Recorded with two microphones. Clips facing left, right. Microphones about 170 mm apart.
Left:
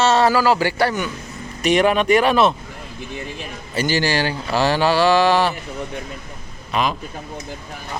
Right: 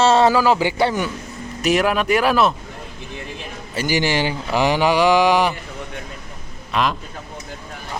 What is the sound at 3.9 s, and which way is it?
Speech, 20° right (ahead or behind).